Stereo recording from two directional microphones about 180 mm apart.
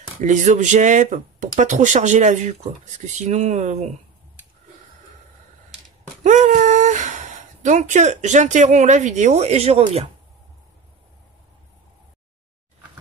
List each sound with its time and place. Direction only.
0.2 s speech: 45° right (ahead or behind)
6.2 s speech: 40° right (ahead or behind)